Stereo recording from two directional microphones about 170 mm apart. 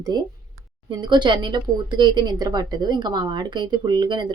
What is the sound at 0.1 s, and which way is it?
Speech, 25° right (ahead or behind).